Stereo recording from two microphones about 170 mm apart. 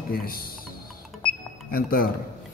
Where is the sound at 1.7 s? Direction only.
55° left (ahead or behind).